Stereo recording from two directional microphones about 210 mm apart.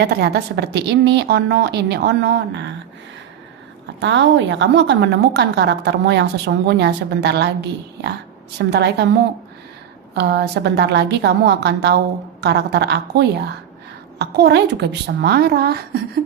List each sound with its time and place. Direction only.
0.0 s a woman's voice: 50° right (ahead or behind)
4.0 s a woman's voice: 60° right (ahead or behind)
10.2 s a woman's voice: 50° right (ahead or behind)